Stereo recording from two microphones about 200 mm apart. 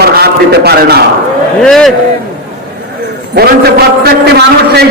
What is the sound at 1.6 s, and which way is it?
Speech, centre (ahead or behind).